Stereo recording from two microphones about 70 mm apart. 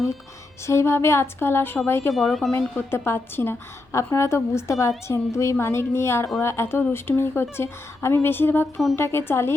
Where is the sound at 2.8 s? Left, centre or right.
Left.